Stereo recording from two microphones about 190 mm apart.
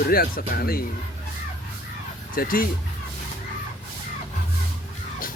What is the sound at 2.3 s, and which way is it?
Speech, 50° left (ahead or behind).